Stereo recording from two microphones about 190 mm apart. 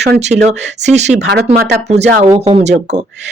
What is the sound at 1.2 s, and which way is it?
Speech, 60° right (ahead or behind).